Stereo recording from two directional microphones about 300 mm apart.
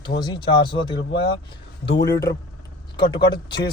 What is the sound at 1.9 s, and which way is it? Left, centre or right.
Speech, centre.